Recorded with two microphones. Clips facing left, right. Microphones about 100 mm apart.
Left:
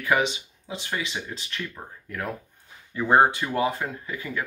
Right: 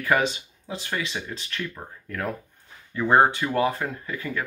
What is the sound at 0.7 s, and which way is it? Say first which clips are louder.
Speech: right 1 dB; 5° left (ahead or behind).